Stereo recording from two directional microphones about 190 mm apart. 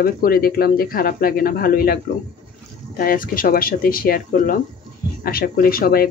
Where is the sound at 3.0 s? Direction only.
50° left (ahead or behind).